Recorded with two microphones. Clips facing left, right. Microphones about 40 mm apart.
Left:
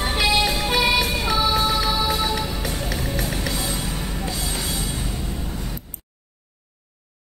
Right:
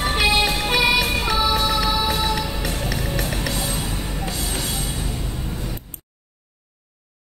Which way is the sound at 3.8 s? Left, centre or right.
Centre.